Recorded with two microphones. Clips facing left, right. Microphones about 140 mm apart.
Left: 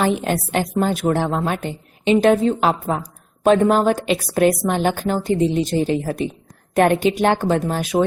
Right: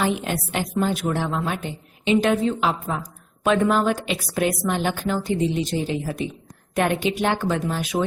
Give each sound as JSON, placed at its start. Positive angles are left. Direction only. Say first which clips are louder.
{"t": 0.0, "sound": "a woman's voice", "louder": "left 4 dB", "side_deg": 50}
{"t": 2.2, "sound": "a woman's voice", "louder": "left 5 dB", "side_deg": 40}